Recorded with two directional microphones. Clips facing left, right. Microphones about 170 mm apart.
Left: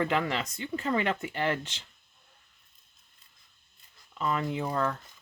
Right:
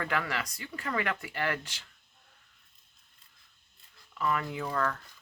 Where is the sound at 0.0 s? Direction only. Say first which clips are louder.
Left 4 dB; 20° left (ahead or behind).